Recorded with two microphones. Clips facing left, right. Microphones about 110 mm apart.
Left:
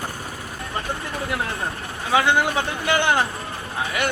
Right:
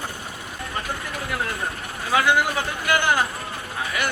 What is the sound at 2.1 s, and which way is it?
A man's voice, 25° left (ahead or behind).